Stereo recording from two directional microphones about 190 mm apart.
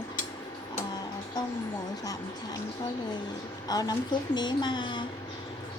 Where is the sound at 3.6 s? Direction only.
20° left (ahead or behind).